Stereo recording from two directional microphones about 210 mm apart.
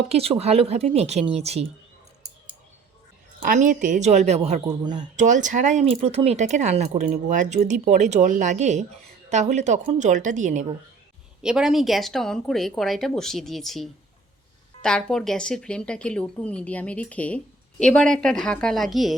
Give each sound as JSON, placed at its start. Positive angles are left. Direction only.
{"t": 0.1, "sound": "speech", "side_deg": -30}
{"t": 3.4, "sound": "speech", "side_deg": -40}
{"t": 5.1, "sound": "speech", "side_deg": -35}
{"t": 11.4, "sound": "a woman's voice", "side_deg": -5}